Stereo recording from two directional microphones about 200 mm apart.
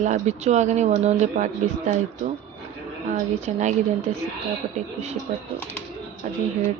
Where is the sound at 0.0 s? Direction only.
35° right (ahead or behind).